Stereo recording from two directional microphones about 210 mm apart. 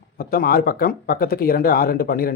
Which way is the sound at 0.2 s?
45° left (ahead or behind).